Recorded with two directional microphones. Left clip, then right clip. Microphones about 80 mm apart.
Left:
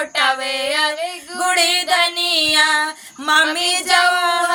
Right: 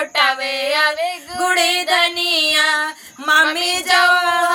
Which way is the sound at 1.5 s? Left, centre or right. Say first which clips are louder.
Left 1 dB; left.